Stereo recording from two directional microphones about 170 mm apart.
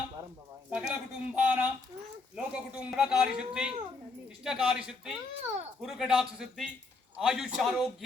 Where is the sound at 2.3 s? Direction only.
5° right (ahead or behind).